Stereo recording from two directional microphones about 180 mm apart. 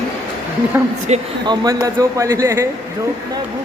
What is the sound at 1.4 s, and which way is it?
A man's voice, 20° right (ahead or behind).